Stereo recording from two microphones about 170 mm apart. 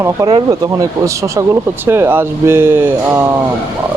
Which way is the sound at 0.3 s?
30° right (ahead or behind).